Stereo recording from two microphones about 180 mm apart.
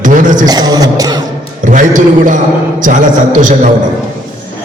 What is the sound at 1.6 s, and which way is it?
A man's voice, 45° right (ahead or behind).